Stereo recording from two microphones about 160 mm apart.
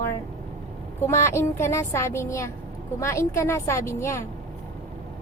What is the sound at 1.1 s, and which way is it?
Speech, 15° left (ahead or behind).